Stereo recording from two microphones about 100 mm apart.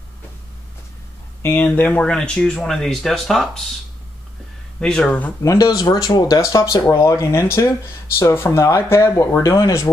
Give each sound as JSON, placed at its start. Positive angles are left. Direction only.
{"t": 1.4, "sound": "speech", "side_deg": 20}
{"t": 4.7, "sound": "speech", "side_deg": 10}
{"t": 5.4, "sound": "speech", "side_deg": 30}